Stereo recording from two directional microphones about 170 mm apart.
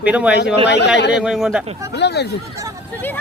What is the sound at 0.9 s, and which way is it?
Speech, 90° left.